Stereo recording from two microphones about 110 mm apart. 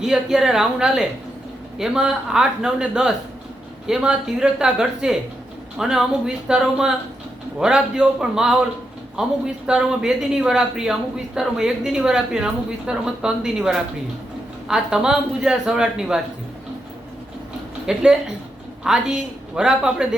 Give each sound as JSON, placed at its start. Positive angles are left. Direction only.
{"t": 0.0, "sound": "a man's voice", "side_deg": -5}
{"t": 17.8, "sound": "speech", "side_deg": -5}